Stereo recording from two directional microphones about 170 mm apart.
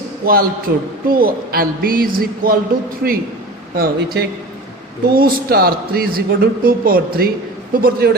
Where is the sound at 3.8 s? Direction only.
60° right (ahead or behind).